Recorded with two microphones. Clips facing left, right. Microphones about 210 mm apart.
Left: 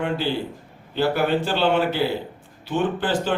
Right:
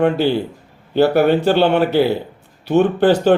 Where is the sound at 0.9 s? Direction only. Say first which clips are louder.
Right 8 dB; 65° right (ahead or behind).